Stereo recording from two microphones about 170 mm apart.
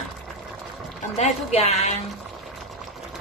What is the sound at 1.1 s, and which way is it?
Speech, 40° left (ahead or behind).